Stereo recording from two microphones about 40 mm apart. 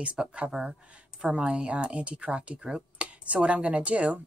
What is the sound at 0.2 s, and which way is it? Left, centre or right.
Speech, right.